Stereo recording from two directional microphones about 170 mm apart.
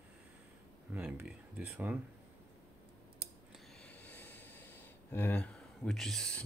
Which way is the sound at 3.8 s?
10° left (ahead or behind).